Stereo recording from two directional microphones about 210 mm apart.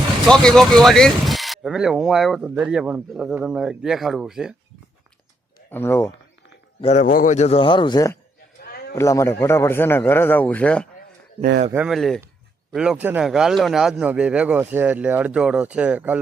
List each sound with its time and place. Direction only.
0.3 s speech: 5° left (ahead or behind)
5.7 s a man's voice: 10° left (ahead or behind)
6.8 s a man's voice: 35° left (ahead or behind); by 8.2 s 15° left (ahead or behind)
8.6 s a sound: 45° left (ahead or behind)
9.0 s a man's voice: 15° left (ahead or behind)
11.7 s speech: 5° right (ahead or behind)